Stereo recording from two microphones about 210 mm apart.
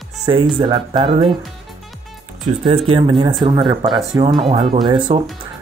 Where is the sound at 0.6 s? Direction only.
25° right (ahead or behind).